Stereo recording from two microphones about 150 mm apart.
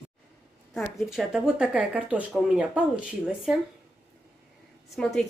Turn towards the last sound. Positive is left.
turn(degrees=5)  # may be behind; listen again after turning